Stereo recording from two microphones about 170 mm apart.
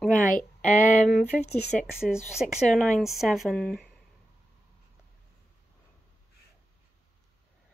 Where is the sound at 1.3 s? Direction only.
10° left (ahead or behind).